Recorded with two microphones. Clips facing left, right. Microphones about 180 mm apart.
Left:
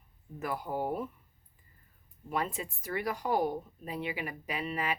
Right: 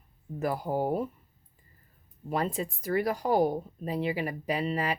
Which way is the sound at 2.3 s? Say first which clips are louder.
Right 4 dB; 35° right (ahead or behind).